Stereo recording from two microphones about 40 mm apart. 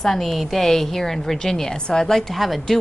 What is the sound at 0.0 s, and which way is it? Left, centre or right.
A woman's voice, centre.